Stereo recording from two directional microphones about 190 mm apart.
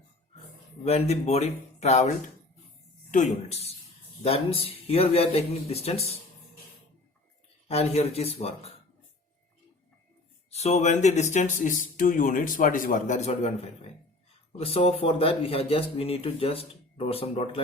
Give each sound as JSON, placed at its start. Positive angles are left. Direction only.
{"t": 0.9, "sound": "speech", "side_deg": 35}
{"t": 7.7, "sound": "speech", "side_deg": 30}
{"t": 10.5, "sound": "speech", "side_deg": 35}